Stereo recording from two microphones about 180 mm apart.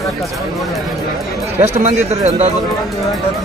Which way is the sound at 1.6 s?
40° right (ahead or behind).